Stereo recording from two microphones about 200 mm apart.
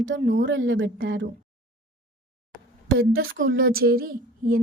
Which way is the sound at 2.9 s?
70° right (ahead or behind).